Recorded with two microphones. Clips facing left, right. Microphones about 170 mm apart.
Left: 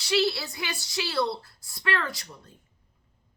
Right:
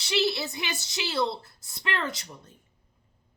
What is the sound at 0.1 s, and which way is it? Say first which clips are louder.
A woman's voice: left 1 dB; 20° right (ahead or behind).